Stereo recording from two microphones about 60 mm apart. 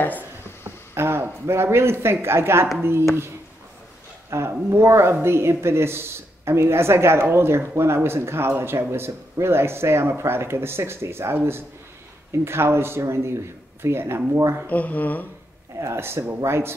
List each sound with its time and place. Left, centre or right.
0.9 s speech: right
4.3 s speech: right
14.7 s speech: left
15.8 s speech: right